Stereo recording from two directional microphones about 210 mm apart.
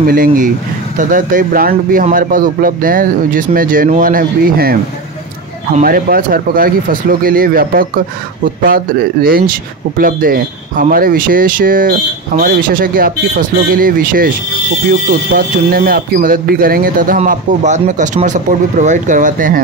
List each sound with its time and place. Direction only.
0.0 s speech: 40° right (ahead or behind)
5.8 s speech: 45° right (ahead or behind)